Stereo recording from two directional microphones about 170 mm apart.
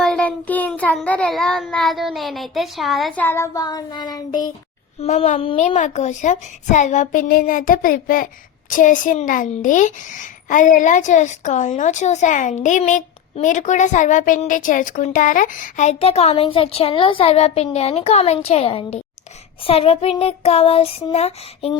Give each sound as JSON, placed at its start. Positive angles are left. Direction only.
{"t": 0.0, "sound": "child singing", "side_deg": 5}
{"t": 4.9, "sound": "child singing", "side_deg": 40}
{"t": 5.7, "sound": "a woman's voice", "side_deg": 45}
{"t": 19.6, "sound": "child singing", "side_deg": 35}